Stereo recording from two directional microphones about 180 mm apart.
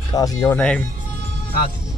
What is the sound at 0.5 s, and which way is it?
Speech, 5° left (ahead or behind).